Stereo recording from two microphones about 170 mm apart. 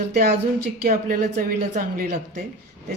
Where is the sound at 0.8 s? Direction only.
55° right (ahead or behind).